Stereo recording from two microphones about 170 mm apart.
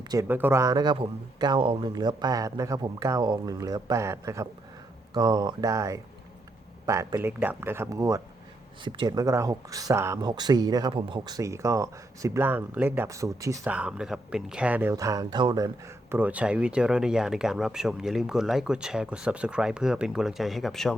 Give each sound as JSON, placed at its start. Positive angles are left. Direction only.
{"t": 0.0, "sound": "speech", "side_deg": -25}
{"t": 0.3, "sound": "speech", "side_deg": -10}
{"t": 8.8, "sound": "speech", "side_deg": -30}
{"t": 13.7, "sound": "speech", "side_deg": -5}